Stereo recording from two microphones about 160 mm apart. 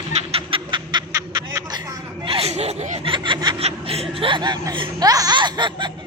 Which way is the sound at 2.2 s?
35° right (ahead or behind).